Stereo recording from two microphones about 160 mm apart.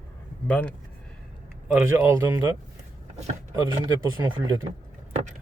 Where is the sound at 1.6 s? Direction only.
15° right (ahead or behind).